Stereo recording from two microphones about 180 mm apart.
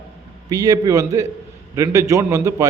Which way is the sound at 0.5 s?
20° right (ahead or behind).